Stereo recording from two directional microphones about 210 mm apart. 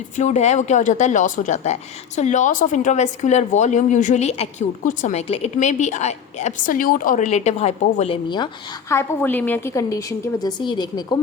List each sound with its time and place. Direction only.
0.2 s a woman's voice: 35° left (ahead or behind)
8.9 s a woman's voice: 10° left (ahead or behind)